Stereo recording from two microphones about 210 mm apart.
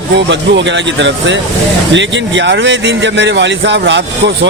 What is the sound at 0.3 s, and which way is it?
Speech, 60° right (ahead or behind).